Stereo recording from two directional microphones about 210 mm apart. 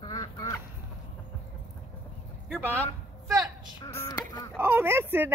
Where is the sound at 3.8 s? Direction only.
15° left (ahead or behind).